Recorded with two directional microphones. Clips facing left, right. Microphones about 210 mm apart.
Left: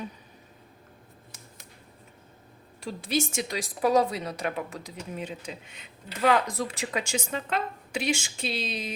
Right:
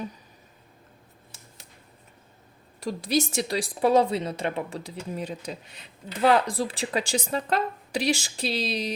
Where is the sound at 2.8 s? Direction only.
40° right (ahead or behind).